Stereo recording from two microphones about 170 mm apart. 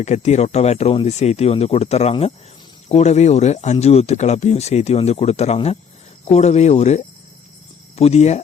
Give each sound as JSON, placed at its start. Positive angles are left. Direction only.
{"t": 0.0, "sound": "speech", "side_deg": 40}